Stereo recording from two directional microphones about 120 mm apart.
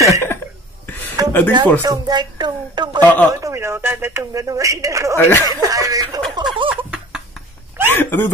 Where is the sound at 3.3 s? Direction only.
25° right (ahead or behind).